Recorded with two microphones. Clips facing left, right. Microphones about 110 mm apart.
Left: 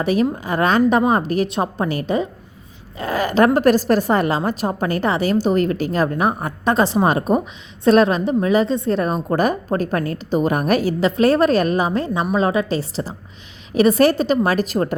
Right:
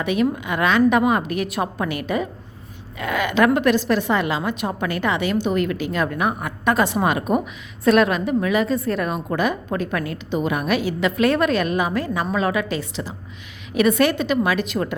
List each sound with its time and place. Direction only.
0.0 s a woman's voice: 35° left (ahead or behind)